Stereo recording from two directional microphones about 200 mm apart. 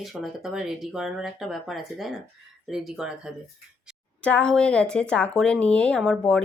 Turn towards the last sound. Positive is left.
turn(degrees=5)  # may be behind; listen again after turning